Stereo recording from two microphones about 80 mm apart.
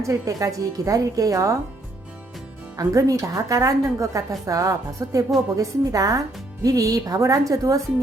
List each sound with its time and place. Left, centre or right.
0.0 s speech: right
2.7 s speech: right